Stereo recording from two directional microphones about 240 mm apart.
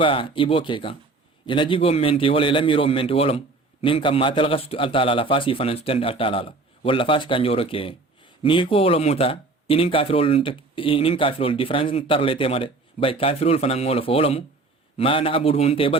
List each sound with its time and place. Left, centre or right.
0.0 s a man's voice: left